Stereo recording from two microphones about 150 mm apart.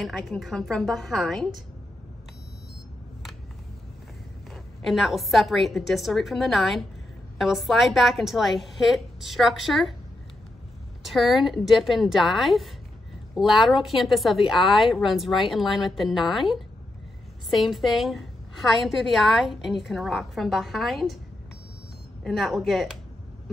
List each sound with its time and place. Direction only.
0.0 s a woman's voice: centre (ahead or behind)
4.8 s a woman's voice: centre (ahead or behind)
11.1 s a woman's voice: centre (ahead or behind)
22.2 s a woman's voice: centre (ahead or behind)